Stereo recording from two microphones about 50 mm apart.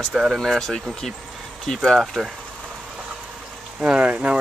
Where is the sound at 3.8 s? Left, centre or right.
Right.